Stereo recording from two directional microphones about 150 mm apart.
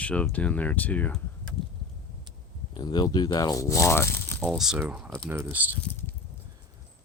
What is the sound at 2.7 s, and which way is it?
Speech, 30° left (ahead or behind).